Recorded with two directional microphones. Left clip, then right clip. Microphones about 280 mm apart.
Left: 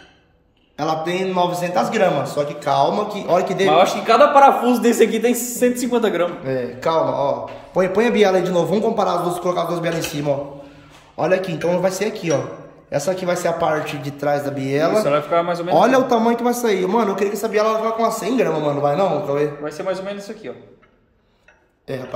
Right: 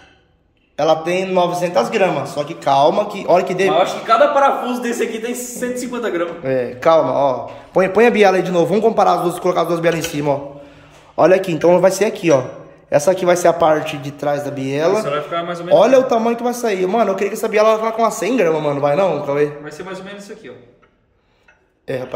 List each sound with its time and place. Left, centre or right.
0.7 s a man's voice: centre
3.8 s a man's voice: left
6.4 s a man's voice: centre
15.0 s speech: left
15.7 s a man's voice: centre
19.6 s a man's voice: centre
21.9 s a man's voice: centre